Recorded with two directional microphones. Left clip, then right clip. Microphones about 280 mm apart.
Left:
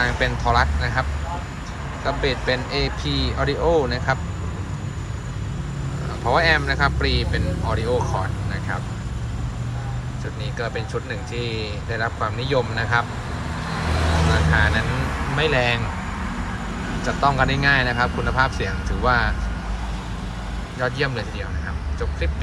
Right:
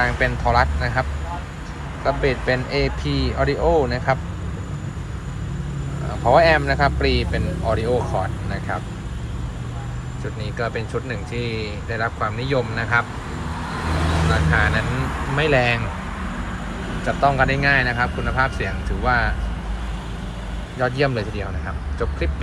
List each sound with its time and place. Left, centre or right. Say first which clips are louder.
0.0 s speech: right 1 dB; centre
2.0 s speech: right 2 dB; centre
3.6 s speech: right 1 dB; centre
3.8 s speech: right 2 dB; centre
6.2 s speech: right 4 dB; centre
10.6 s speech: right 2 dB; centre
14.5 s speech: right 1 dB; centre
17.1 s speech: right 2 dB; centre
20.7 s speech: right 3 dB; centre